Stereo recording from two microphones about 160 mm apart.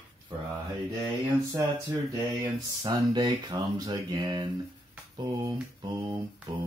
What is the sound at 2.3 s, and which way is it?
Speech, 25° right (ahead or behind).